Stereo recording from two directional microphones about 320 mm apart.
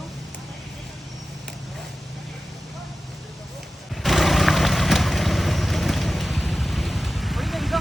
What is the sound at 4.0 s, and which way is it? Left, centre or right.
Vehicle, centre.